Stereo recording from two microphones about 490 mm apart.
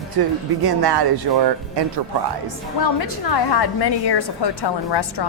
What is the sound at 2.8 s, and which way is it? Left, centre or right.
A woman's voice, left.